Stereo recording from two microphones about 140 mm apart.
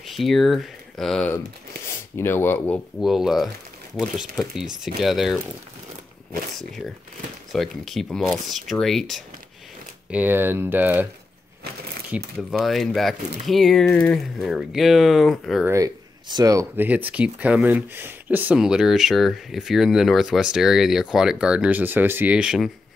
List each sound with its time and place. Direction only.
0.0 s speech: centre (ahead or behind)
1.9 s speech: 15° left (ahead or behind)
3.0 s speech: 5° right (ahead or behind)
7.5 s speech: centre (ahead or behind)
10.1 s speech: 15° right (ahead or behind)
12.1 s speech: 5° right (ahead or behind)
15.7 s speech: 30° right (ahead or behind); by 22.7 s 5° right (ahead or behind)